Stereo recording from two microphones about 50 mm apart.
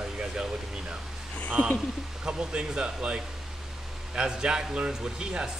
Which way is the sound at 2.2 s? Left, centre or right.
Centre.